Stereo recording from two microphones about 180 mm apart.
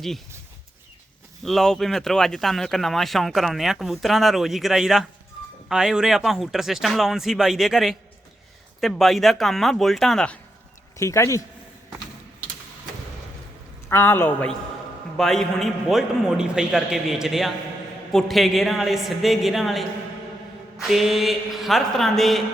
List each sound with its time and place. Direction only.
1.5 s speech: centre (ahead or behind)
10.9 s a man's voice: 15° left (ahead or behind)
13.8 s a man's voice: 15° left (ahead or behind)